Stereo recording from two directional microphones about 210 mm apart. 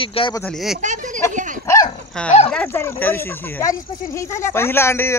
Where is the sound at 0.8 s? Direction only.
35° right (ahead or behind).